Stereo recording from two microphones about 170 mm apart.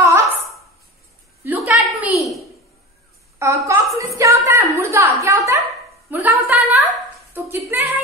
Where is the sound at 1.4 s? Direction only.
10° right (ahead or behind).